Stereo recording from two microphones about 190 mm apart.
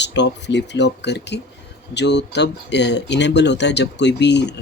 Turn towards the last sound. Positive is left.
turn(degrees=65)  # may be behind; listen again after turning